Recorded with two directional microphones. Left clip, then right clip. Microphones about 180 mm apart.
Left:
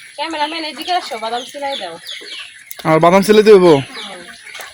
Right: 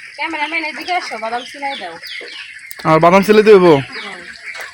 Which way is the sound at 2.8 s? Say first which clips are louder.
Right 1 dB; 5° left (ahead or behind).